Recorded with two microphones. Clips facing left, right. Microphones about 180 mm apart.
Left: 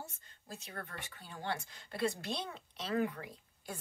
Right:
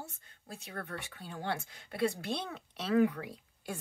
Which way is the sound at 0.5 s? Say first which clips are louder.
Right 4 dB; 60° right (ahead or behind).